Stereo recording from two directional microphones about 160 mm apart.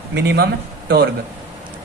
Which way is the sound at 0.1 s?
90° right.